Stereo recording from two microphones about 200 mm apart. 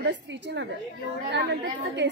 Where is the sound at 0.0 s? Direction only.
65° right (ahead or behind).